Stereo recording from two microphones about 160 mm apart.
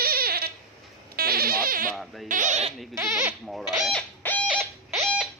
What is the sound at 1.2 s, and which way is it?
Goat, 70° right (ahead or behind).